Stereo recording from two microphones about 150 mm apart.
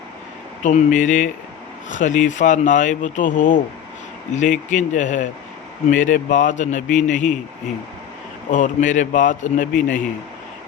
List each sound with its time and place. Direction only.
0.6 s speech: 50° left (ahead or behind)
8.4 s speech: 60° left (ahead or behind)